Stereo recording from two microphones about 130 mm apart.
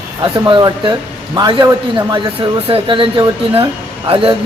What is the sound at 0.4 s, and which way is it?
Speech, 35° right (ahead or behind).